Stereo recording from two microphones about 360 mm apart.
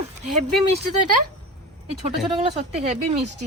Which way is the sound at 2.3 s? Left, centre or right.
Centre.